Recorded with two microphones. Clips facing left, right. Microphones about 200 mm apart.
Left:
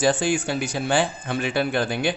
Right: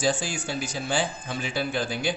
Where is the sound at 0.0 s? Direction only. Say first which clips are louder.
Left 6 dB; 60° left (ahead or behind).